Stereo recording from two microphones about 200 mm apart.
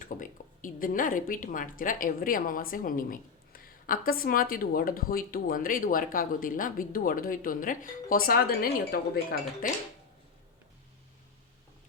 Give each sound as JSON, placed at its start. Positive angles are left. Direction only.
{"t": 0.0, "sound": "speech", "side_deg": 40}